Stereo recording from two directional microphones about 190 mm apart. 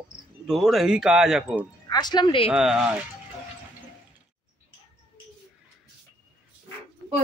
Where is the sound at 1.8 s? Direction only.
20° left (ahead or behind).